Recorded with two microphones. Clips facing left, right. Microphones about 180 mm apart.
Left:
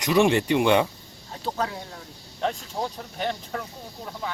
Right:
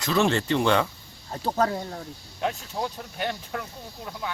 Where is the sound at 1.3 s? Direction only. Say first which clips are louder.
Right 4 dB; 45° right (ahead or behind).